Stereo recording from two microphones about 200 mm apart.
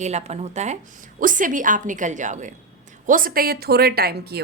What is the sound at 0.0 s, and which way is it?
A woman's voice, 35° right (ahead or behind).